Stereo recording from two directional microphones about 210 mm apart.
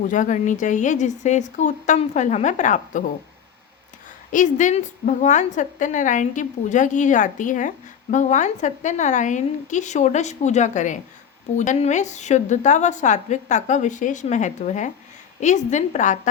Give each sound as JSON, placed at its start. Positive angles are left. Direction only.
{"t": 0.1, "sound": "a woman's voice", "side_deg": 35}
{"t": 4.3, "sound": "a woman's voice", "side_deg": 35}